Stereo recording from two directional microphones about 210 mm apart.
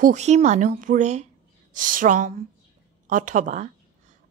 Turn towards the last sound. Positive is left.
turn(degrees=-35)  # may be behind; listen again after turning